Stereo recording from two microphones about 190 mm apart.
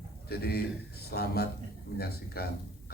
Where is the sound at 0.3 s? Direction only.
55° left (ahead or behind).